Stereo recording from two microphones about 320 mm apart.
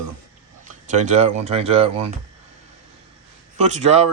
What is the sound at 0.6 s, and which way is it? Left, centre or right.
Speech, right.